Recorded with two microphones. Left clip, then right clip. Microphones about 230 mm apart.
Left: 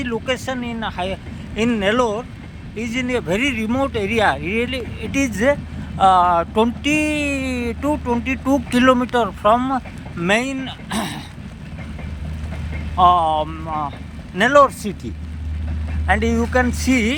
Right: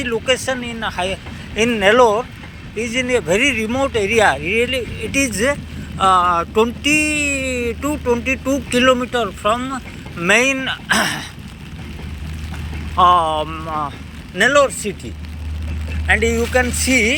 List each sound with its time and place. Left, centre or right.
0.0 s speech: centre
10.2 s speech: centre
13.0 s speech: centre
14.3 s speech: centre
16.0 s speech: centre